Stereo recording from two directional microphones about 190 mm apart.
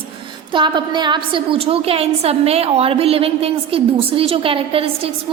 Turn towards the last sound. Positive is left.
turn(degrees=-30)  # may be behind; listen again after turning